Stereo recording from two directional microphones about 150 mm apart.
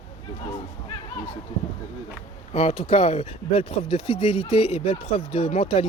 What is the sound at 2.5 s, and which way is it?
Speech, 45° left (ahead or behind).